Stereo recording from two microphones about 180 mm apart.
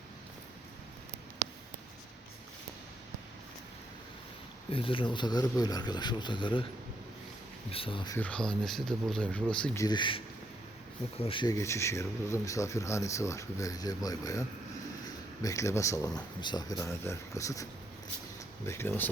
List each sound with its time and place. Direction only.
4.7 s speech: 30° left (ahead or behind)
7.7 s speech: 30° left (ahead or behind)
8.1 s speech: 5° left (ahead or behind)
9.7 s speech: 20° left (ahead or behind)